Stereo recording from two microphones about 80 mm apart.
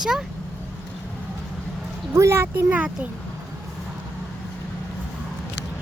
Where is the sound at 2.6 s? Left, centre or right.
Centre.